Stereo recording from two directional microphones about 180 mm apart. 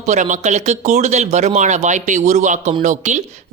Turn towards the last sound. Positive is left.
turn(degrees=-40)  # may be behind; listen again after turning